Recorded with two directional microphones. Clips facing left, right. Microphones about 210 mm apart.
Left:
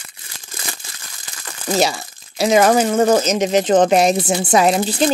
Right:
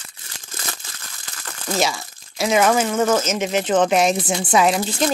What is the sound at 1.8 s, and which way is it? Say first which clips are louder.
Speech: left 4 dB; 35° left (ahead or behind).